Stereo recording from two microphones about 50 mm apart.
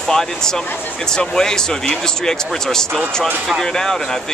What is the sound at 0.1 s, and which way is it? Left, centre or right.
Speech, centre.